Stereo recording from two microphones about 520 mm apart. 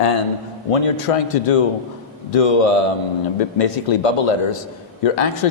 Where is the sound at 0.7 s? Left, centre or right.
Left.